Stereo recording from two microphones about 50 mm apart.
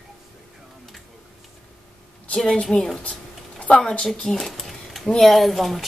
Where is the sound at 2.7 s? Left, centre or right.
Left.